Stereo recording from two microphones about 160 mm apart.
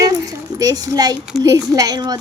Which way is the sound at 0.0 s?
20° right (ahead or behind).